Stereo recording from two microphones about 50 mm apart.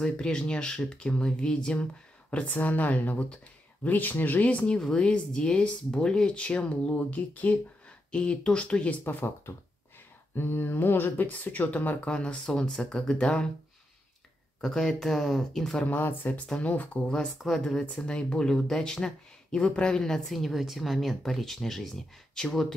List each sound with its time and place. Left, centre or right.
0.0 s speech: centre
2.3 s speech: left
4.7 s speech: centre
8.1 s speech: left
9.0 s a sound: left
10.3 s a sound: left
11.2 s speech: left
12.1 s speech: left
14.6 s speech: centre
15.8 s speech: left
17.7 s a woman's voice: centre